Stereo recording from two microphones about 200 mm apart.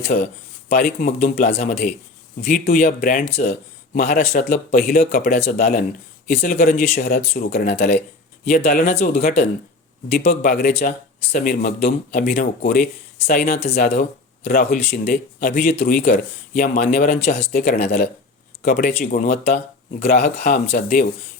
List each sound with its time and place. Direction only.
0.0 s speech: 40° left (ahead or behind)
3.9 s speech: 45° left (ahead or behind)